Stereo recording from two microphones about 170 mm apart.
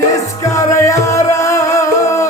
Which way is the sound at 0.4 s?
20° left (ahead or behind).